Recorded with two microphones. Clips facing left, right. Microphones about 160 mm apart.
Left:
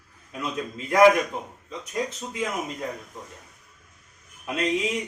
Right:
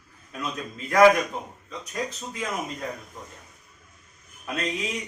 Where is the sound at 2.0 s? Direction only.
20° left (ahead or behind).